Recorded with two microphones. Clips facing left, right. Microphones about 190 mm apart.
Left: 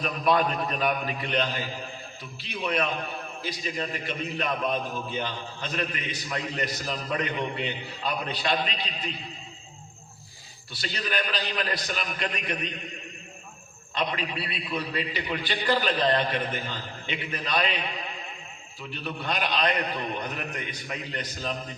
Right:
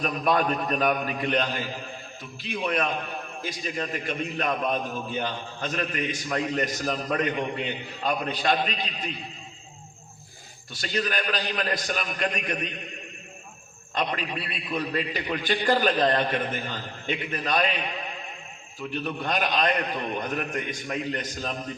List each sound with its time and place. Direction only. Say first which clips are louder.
0.0 s a man's voice: even; 45° right (ahead or behind)
10.7 s a man's voice: right 4 dB; 45° right (ahead or behind)
13.9 s a man's voice: right 1 dB; 45° right (ahead or behind)
18.8 s a man's voice: right 5 dB; 45° right (ahead or behind)